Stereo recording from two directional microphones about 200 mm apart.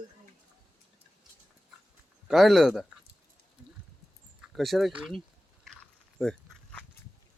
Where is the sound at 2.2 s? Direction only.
Centre (ahead or behind).